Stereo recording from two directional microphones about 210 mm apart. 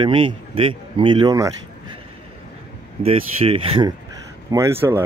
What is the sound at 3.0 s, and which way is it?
Speech, 25° right (ahead or behind).